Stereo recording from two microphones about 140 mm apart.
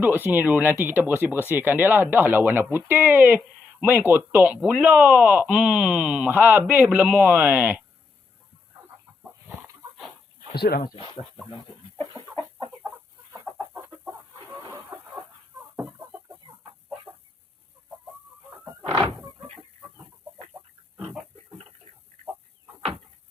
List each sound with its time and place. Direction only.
0.0 s speech: 15° right (ahead or behind)
10.5 s speech: 90° left
10.9 s speech: 40° left (ahead or behind)
14.5 s chicken: 15° right (ahead or behind)
18.8 s a sound: 30° right (ahead or behind)